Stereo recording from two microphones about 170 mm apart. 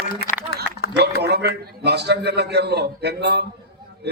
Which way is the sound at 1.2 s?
75° right (ahead or behind).